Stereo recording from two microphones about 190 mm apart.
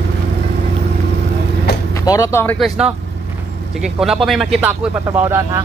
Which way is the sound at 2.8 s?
5° right (ahead or behind).